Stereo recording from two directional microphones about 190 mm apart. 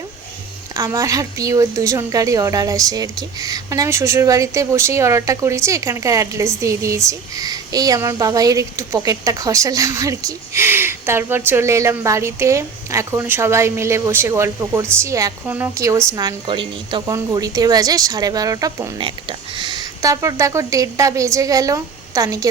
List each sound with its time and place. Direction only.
0.7 s a woman's voice: 15° right (ahead or behind)
18.9 s a woman's voice: 25° right (ahead or behind)